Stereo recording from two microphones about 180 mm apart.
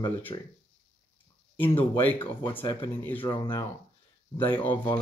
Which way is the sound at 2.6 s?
25° left (ahead or behind).